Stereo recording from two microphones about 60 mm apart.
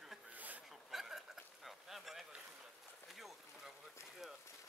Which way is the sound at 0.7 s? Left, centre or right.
Centre.